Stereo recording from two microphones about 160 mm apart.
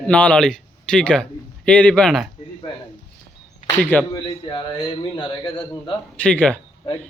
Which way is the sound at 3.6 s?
10° left (ahead or behind).